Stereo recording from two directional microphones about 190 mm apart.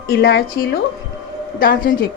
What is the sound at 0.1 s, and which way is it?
A woman's voice, 50° left (ahead or behind).